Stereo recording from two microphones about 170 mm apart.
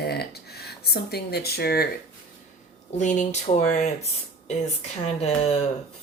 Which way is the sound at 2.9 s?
45° left (ahead or behind).